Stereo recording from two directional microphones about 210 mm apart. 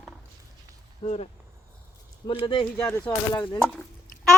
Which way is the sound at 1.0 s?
30° left (ahead or behind).